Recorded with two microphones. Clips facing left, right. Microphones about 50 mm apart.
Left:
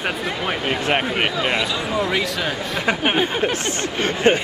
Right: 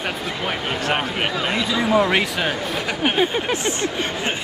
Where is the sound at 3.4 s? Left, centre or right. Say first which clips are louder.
Right 1 dB; centre.